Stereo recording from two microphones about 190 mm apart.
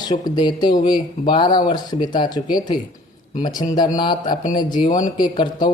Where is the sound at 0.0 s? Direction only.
20° left (ahead or behind).